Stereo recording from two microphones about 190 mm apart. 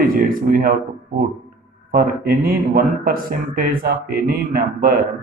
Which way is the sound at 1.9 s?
50° right (ahead or behind).